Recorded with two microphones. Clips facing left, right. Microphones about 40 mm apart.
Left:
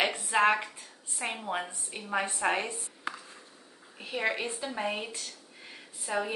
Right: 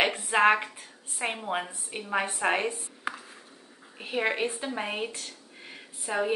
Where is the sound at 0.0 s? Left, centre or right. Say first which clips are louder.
Right 3 dB; right.